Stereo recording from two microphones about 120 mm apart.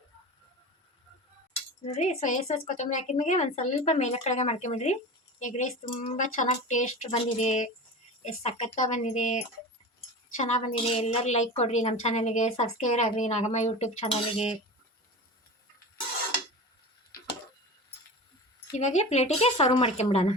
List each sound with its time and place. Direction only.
1.8 s a woman's voice: 75° left (ahead or behind)
5.4 s a woman's voice: 85° left
8.2 s a woman's voice: 60° left (ahead or behind); by 9.4 s 85° left
10.4 s a woman's voice: 75° left (ahead or behind)
18.8 s a woman's voice: 70° left (ahead or behind)